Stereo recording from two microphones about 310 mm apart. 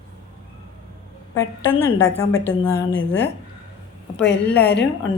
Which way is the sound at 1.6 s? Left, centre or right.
Left.